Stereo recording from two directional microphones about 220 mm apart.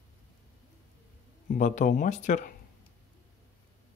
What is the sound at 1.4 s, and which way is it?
Speech, 35° left (ahead or behind).